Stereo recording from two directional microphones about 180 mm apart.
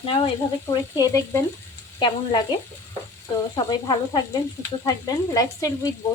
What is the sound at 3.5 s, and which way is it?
Speech, 25° left (ahead or behind).